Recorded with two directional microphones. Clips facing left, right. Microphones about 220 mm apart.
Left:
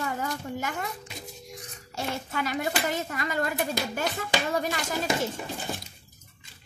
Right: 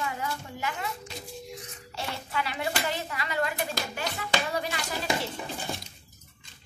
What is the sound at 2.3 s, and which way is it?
Speech, 45° left (ahead or behind).